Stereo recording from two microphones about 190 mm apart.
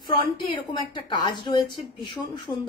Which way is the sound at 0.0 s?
25° left (ahead or behind).